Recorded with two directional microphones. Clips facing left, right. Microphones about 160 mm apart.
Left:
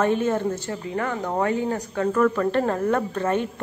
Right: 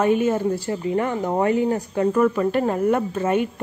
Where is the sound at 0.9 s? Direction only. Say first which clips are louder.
Right 3 dB; 20° right (ahead or behind).